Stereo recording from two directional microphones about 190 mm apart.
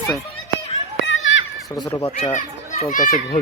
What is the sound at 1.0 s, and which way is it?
Children playing, 80° left.